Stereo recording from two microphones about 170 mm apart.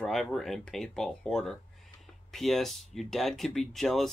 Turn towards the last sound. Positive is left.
turn(degrees=0)  # may be behind; listen again after turning